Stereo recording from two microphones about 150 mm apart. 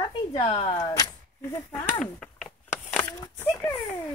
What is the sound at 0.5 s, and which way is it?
Speech, 35° left (ahead or behind).